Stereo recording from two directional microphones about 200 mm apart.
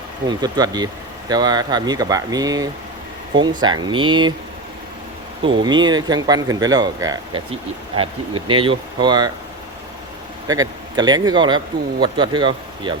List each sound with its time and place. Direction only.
0.3 s speech: 20° right (ahead or behind)
5.4 s speech: 25° right (ahead or behind)
10.4 s speech: 20° right (ahead or behind)